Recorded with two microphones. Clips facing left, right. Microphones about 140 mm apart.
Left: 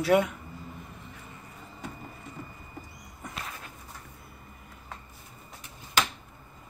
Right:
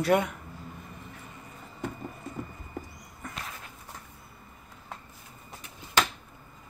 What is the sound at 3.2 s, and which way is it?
Walk, 20° left (ahead or behind).